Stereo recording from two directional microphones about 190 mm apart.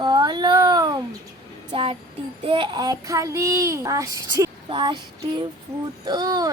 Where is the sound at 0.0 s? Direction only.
20° right (ahead or behind).